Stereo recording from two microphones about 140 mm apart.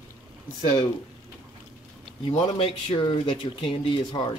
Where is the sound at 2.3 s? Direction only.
45° left (ahead or behind).